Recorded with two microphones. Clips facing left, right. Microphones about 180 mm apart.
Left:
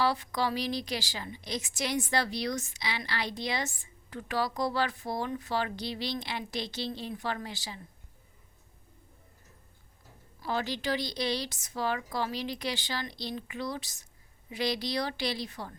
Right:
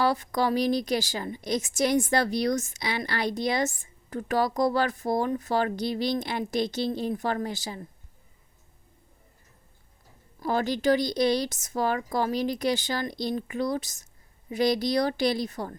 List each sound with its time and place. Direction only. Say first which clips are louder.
0.0 s a woman's voice: right 4 dB; 45° right (ahead or behind)
10.4 s a woman's voice: right 8 dB; 45° right (ahead or behind)